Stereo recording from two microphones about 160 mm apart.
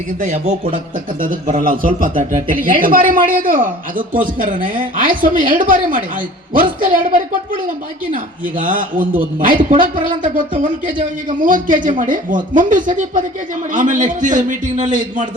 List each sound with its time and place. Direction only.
0.2 s a man's voice: 45° right (ahead or behind)
1.2 s a man's voice: 55° right (ahead or behind)